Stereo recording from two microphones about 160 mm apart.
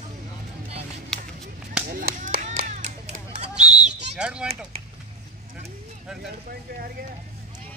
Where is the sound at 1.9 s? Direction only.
60° right (ahead or behind); by 3.7 s 45° right (ahead or behind).